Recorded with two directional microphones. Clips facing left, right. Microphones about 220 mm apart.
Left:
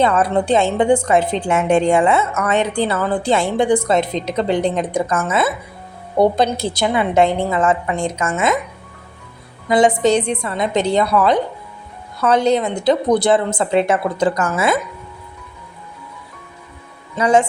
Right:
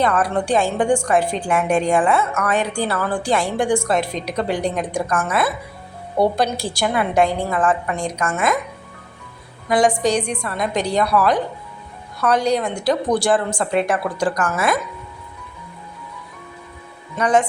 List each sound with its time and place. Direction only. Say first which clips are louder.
0.0 s a woman's voice: left 3 dB; 25° left (ahead or behind)
9.6 s a woman's voice: left 3 dB; 25° left (ahead or behind)
17.2 s a woman's voice: left 3 dB; 25° left (ahead or behind)